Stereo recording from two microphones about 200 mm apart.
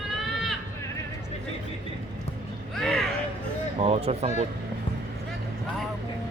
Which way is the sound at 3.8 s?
30° right (ahead or behind).